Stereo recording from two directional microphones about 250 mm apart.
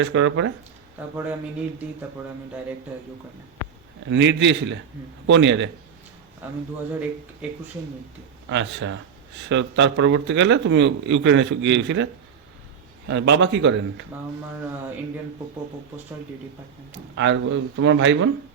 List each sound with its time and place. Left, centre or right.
0.0 s speech: right
0.9 s speech: centre
4.1 s speech: right
6.4 s speech: centre
8.4 s speech: right
13.1 s speech: right
14.1 s speech: centre
17.2 s speech: right